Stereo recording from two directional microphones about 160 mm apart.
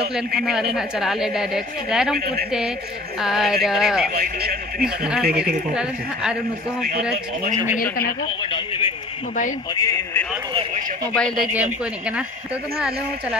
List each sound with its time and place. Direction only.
0.1 s a woman's voice: centre (ahead or behind)
2.1 s a man's voice: 70° right (ahead or behind)
3.2 s a woman's voice: 5° right (ahead or behind)
4.1 s a man's voice: 70° right (ahead or behind)
4.8 s a woman's voice: 5° right (ahead or behind)
8.4 s a man's voice: 30° left (ahead or behind)
9.8 s speech: 20° left (ahead or behind)